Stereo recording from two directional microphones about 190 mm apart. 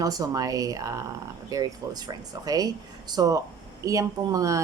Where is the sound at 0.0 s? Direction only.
20° right (ahead or behind).